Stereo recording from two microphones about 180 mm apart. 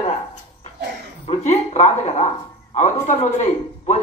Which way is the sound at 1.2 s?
40° left (ahead or behind).